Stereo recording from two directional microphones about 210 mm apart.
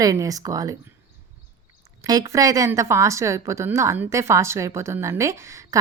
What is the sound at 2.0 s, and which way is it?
A woman's voice, 15° right (ahead or behind).